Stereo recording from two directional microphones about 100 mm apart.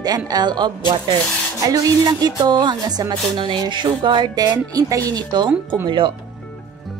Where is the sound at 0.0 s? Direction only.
40° right (ahead or behind).